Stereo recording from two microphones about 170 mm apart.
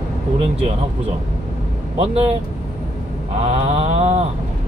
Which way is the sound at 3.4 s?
40° right (ahead or behind).